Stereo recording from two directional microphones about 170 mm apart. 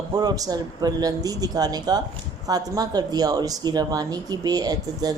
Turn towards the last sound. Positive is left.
turn(degrees=-20)  # may be behind; listen again after turning